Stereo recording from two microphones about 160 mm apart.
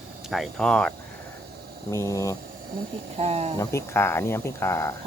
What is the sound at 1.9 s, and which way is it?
Speech, 20° left (ahead or behind).